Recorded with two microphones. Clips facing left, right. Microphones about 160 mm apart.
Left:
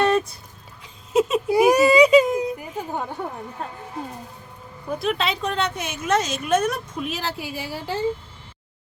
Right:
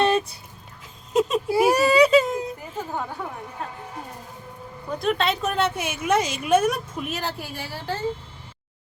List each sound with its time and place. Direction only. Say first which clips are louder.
1.1 s baby cry: left 2 dB; centre (ahead or behind)
1.5 s baby cry: left 5 dB; 15° left (ahead or behind)
4.9 s a woman's voice: right 1 dB; centre (ahead or behind)
7.1 s a woman's voice: left 1 dB; centre (ahead or behind)